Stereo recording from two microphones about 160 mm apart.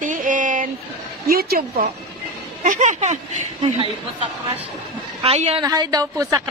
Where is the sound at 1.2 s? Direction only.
70° right (ahead or behind).